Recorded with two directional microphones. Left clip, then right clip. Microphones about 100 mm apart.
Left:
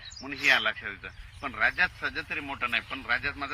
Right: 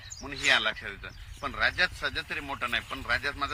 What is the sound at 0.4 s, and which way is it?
Speech, 30° right (ahead or behind).